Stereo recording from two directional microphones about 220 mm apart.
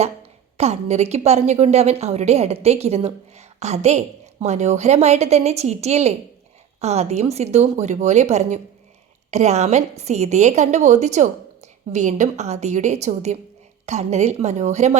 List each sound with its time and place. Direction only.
0.5 s a woman's voice: 30° right (ahead or behind)